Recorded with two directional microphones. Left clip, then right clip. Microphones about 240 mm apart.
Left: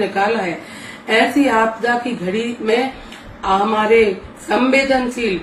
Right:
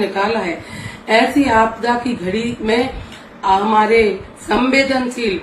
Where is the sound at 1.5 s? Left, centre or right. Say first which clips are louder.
Right 1 dB; centre.